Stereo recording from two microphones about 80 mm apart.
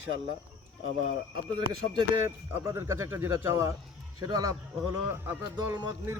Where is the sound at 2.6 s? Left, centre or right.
Right.